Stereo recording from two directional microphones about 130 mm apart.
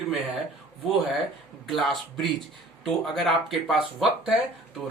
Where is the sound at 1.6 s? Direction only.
Centre (ahead or behind).